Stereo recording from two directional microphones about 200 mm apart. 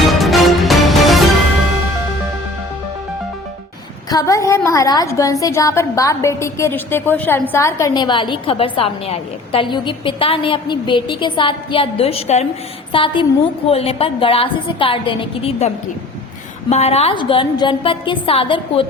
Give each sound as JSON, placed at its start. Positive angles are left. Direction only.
{"t": 0.2, "sound": "music", "side_deg": 0}
{"t": 4.1, "sound": "a woman's voice", "side_deg": 15}